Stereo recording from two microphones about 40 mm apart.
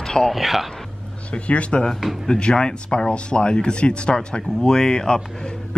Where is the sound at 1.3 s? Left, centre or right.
Left.